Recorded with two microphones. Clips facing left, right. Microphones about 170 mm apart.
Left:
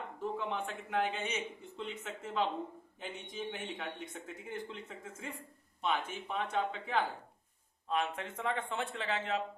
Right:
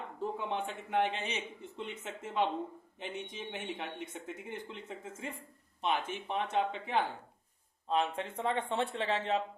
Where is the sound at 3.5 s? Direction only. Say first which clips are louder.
Right 1 dB; 25° right (ahead or behind).